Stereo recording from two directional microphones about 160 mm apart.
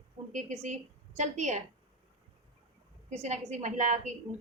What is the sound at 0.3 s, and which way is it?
A woman's voice, 50° right (ahead or behind).